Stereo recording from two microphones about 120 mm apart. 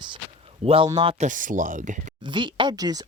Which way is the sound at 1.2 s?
90° right.